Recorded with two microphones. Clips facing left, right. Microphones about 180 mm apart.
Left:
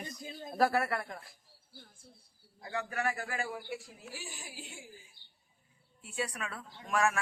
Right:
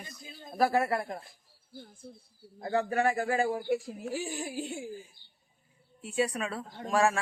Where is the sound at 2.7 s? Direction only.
30° right (ahead or behind).